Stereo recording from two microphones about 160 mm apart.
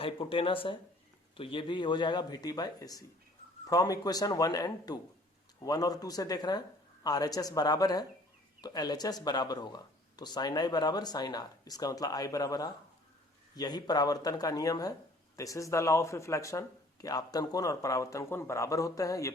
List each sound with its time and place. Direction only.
0.0 s speech: 35° left (ahead or behind)